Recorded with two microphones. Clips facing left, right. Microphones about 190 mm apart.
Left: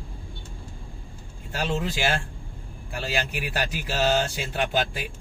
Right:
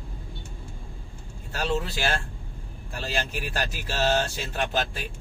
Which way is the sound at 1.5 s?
15° left (ahead or behind).